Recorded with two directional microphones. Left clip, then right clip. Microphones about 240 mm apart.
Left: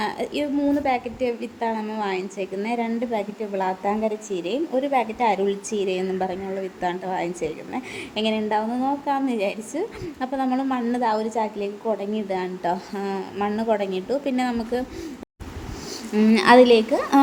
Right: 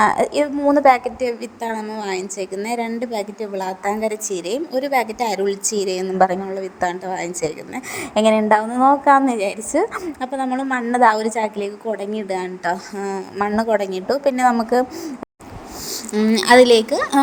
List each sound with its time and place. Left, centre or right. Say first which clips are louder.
0.0 s a woman's voice: right 10 dB; right
3.8 s a woman's voice: right 3 dB; right
4.5 s a woman's voice: right 3 dB; right
16.1 s a woman's voice: right 2 dB; right